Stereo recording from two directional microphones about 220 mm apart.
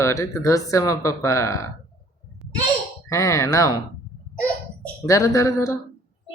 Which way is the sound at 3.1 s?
15° left (ahead or behind).